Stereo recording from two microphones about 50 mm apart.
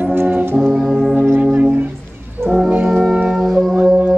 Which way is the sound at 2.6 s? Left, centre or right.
Right.